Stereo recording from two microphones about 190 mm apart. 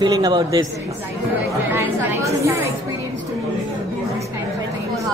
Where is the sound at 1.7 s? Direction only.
15° right (ahead or behind).